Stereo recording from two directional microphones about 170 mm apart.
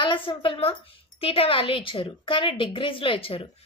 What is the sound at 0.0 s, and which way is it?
A woman's voice, 30° left (ahead or behind).